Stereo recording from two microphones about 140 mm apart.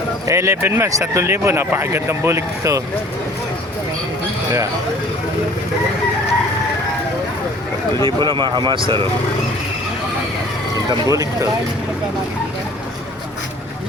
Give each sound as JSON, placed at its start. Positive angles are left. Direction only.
{"t": 0.3, "sound": "speech", "side_deg": -20}
{"t": 8.0, "sound": "speech", "side_deg": -35}
{"t": 10.8, "sound": "speech", "side_deg": -25}